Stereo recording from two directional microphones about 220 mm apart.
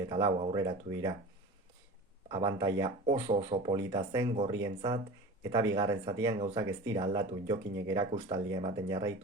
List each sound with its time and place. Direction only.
0.1 s speech: 15° right (ahead or behind)
2.3 s speech: 15° right (ahead or behind)